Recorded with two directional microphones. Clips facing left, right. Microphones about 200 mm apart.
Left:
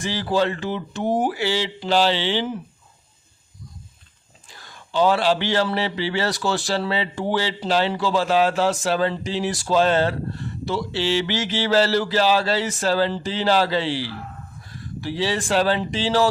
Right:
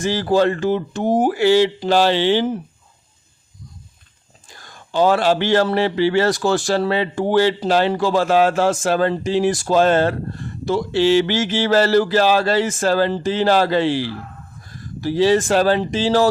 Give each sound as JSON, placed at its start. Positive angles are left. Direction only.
{"t": 0.0, "sound": "speech", "side_deg": -45}
{"t": 4.4, "sound": "speech", "side_deg": -45}